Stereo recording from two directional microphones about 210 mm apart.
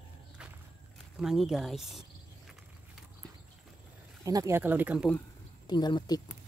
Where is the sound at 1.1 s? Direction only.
Centre (ahead or behind).